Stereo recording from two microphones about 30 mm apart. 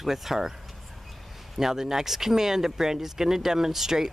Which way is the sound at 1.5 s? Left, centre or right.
Centre.